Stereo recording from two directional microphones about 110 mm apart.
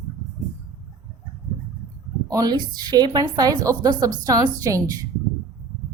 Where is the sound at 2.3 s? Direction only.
35° right (ahead or behind).